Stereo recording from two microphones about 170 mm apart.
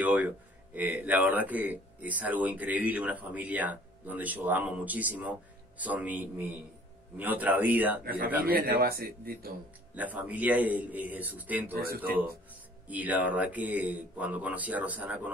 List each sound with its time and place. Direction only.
0.0 s speech: 10° right (ahead or behind)
8.0 s speech: 60° right (ahead or behind)
9.9 s speech: 10° right (ahead or behind)
12.8 s speech: 10° right (ahead or behind)